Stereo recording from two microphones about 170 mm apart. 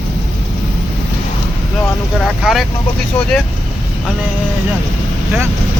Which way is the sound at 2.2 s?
Centre (ahead or behind).